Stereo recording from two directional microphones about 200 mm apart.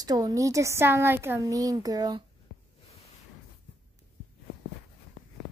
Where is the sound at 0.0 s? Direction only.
20° right (ahead or behind).